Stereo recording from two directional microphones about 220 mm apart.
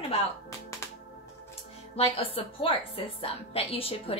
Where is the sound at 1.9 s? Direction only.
25° left (ahead or behind).